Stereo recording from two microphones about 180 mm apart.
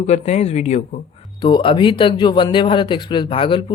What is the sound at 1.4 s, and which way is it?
Speech, 25° left (ahead or behind).